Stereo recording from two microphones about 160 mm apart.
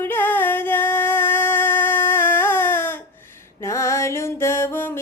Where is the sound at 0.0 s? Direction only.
15° left (ahead or behind).